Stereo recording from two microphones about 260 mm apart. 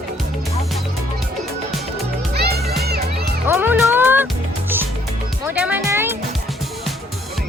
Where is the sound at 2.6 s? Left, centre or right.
Centre.